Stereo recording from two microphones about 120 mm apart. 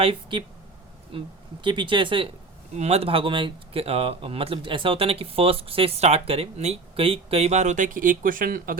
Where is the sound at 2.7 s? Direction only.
60° right (ahead or behind); by 8.2 s 90° right.